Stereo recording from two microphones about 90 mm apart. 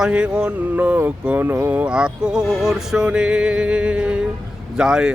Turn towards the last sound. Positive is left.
turn(degrees=-10)  # may be behind; listen again after turning